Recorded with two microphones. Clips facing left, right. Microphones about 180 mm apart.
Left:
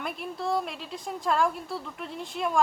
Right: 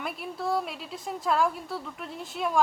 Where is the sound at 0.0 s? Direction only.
Centre (ahead or behind).